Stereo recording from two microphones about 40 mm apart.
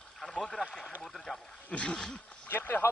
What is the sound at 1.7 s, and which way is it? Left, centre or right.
Speech, left.